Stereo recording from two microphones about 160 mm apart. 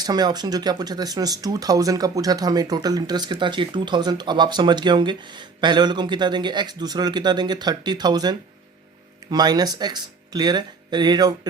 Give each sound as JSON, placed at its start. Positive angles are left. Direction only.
{"t": 0.0, "sound": "speech", "side_deg": -25}